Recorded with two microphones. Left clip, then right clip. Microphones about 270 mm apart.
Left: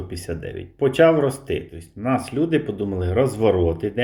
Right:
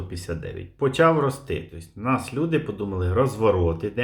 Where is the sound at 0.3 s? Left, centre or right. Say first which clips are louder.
Left 2 dB; centre.